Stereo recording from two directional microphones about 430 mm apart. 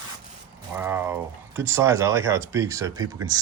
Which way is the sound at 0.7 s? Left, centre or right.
Centre.